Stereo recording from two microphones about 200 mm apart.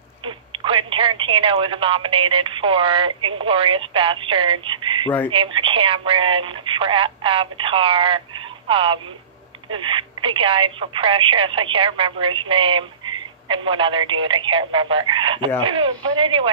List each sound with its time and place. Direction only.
0.2 s speech: 25° right (ahead or behind)